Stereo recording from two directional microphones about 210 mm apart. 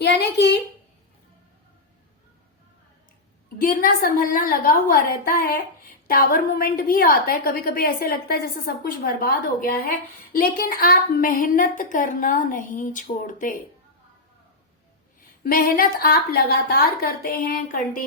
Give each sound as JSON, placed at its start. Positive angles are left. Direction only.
{"t": 0.0, "sound": "a woman's voice", "side_deg": 55}
{"t": 3.6, "sound": "a woman's voice", "side_deg": 40}
{"t": 15.4, "sound": "a woman's voice", "side_deg": 45}